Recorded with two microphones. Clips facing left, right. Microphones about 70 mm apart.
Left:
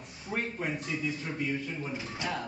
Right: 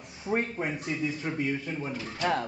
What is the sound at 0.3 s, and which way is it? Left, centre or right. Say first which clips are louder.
Speech: right 5 dB; right.